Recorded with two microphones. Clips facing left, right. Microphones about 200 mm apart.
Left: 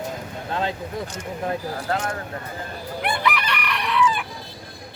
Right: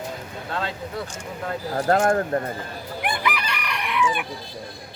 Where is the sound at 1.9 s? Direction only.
50° right (ahead or behind).